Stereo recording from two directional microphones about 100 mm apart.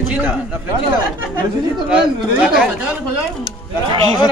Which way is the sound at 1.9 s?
10° right (ahead or behind).